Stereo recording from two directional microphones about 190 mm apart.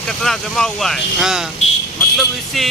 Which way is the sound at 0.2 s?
Centre (ahead or behind).